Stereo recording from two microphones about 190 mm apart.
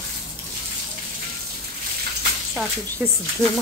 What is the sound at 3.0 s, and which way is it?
Speech, 10° right (ahead or behind).